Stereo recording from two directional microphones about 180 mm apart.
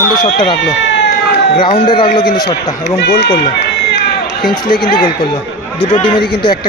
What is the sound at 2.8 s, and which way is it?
Speech, 65° left (ahead or behind).